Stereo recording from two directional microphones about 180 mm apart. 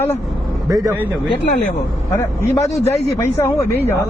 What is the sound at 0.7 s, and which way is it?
Speech, 20° right (ahead or behind).